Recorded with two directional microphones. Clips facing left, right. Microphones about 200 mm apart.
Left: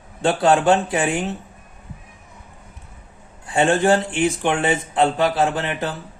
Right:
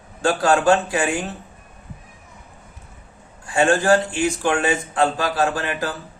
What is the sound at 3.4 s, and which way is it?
Speech, 20° left (ahead or behind).